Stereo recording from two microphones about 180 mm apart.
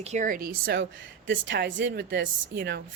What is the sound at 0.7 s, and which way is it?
A woman's voice, 85° right.